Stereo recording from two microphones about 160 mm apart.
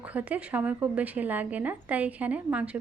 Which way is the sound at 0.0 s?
10° right (ahead or behind).